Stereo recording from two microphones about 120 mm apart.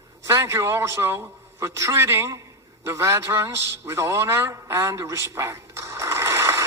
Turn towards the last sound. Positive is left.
turn(degrees=-25)  # may be behind; listen again after turning